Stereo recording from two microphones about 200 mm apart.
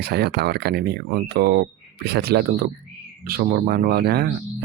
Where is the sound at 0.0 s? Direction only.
55° right (ahead or behind).